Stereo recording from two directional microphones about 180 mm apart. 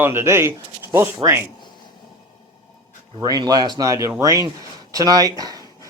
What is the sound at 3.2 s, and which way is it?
Speech, 20° right (ahead or behind).